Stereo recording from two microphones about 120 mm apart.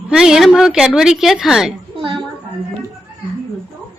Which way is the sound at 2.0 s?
45° right (ahead or behind).